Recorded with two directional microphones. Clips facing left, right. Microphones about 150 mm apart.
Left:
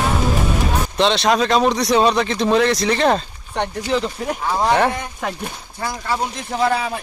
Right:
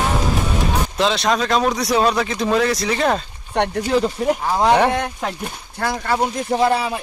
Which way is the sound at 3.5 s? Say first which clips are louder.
Right 2 dB; 55° right (ahead or behind).